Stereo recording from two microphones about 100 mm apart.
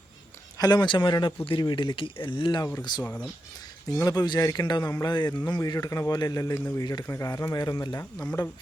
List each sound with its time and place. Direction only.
0.6 s speech: 45° left (ahead or behind)
3.9 s speech: 35° left (ahead or behind)
5.0 s speech: 45° left (ahead or behind)
8.2 s speech: 20° left (ahead or behind)